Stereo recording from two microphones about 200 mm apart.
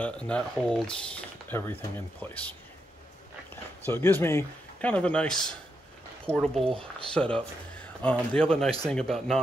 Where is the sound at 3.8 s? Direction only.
10° left (ahead or behind).